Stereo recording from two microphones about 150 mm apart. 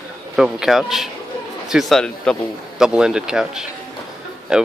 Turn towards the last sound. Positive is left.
turn(degrees=-5)  # may be behind; listen again after turning